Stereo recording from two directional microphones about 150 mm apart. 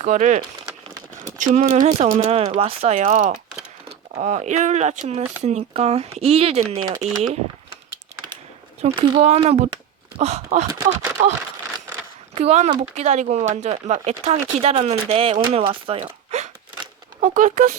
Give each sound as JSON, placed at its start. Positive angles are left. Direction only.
{"t": 0.0, "sound": "speech", "side_deg": -55}
{"t": 9.0, "sound": "speech", "side_deg": -40}
{"t": 10.7, "sound": "speech", "side_deg": -20}
{"t": 12.3, "sound": "speech", "side_deg": -45}
{"t": 17.2, "sound": "speech", "side_deg": -60}